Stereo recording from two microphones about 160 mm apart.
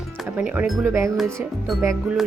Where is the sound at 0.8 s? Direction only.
20° right (ahead or behind).